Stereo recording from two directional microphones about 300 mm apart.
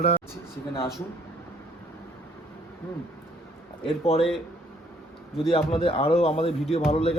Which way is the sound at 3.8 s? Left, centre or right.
Centre.